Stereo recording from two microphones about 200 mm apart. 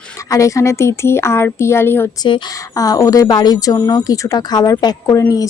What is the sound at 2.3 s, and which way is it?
A woman's voice, 20° left (ahead or behind).